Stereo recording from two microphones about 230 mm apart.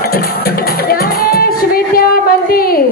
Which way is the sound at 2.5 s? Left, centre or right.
Left.